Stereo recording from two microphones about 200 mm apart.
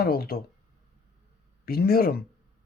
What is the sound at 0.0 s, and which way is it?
Speech, 50° left (ahead or behind).